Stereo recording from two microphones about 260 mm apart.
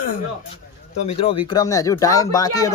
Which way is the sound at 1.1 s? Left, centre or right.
Left.